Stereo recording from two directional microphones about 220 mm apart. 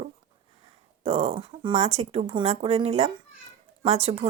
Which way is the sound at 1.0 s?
25° right (ahead or behind).